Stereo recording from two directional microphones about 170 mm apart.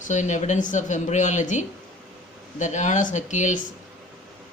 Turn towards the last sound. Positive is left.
turn(degrees=45)  # may be behind; listen again after turning